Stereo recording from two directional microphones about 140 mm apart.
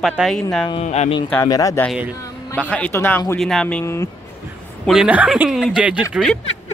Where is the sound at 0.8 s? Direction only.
50° left (ahead or behind).